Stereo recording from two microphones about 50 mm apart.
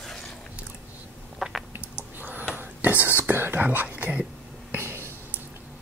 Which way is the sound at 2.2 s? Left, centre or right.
Right.